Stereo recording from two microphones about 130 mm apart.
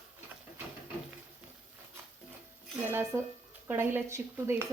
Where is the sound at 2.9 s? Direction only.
15° right (ahead or behind).